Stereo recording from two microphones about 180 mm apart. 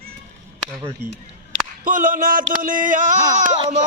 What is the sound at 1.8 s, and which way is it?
Mantra, 50° right (ahead or behind).